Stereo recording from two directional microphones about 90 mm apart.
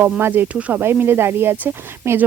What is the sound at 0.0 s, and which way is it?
Speech, 25° right (ahead or behind).